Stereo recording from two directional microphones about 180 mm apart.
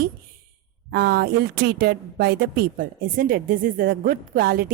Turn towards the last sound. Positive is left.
turn(degrees=-55)  # may be behind; listen again after turning